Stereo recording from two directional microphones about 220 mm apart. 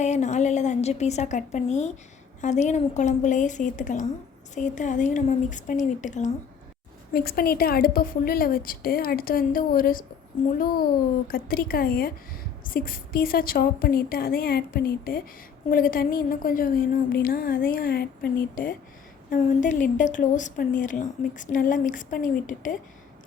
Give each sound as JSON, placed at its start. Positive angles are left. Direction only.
{"t": 0.0, "sound": "a woman's voice", "side_deg": 30}
{"t": 11.3, "sound": "a woman's voice", "side_deg": 40}